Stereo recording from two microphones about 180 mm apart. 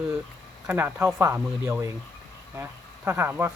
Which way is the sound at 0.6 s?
10° right (ahead or behind).